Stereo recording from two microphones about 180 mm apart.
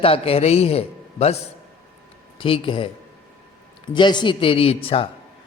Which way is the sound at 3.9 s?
25° left (ahead or behind).